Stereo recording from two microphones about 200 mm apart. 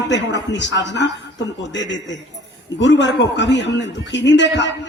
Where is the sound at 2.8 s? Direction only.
65° left (ahead or behind).